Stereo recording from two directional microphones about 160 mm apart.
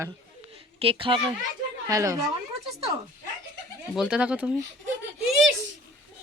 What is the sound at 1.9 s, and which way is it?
Speech, 20° right (ahead or behind).